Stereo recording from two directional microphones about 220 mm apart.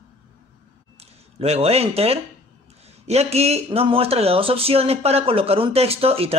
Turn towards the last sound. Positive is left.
turn(degrees=-25)  # may be behind; listen again after turning